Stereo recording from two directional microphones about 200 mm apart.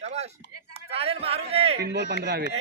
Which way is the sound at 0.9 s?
30° right (ahead or behind).